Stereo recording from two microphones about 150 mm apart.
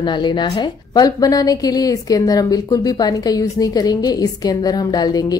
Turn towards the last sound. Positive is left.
turn(degrees=25)  # may be behind; listen again after turning